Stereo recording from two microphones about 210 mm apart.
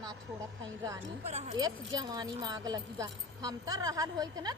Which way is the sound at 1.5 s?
20° right (ahead or behind).